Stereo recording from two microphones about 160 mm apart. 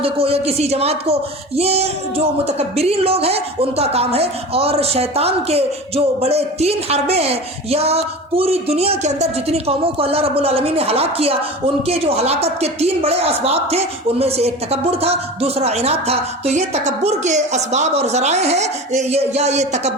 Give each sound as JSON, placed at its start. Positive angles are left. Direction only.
{"t": 0.0, "sound": "speech", "side_deg": -35}